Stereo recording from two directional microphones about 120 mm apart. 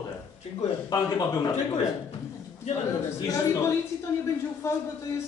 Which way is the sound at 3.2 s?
30° left (ahead or behind).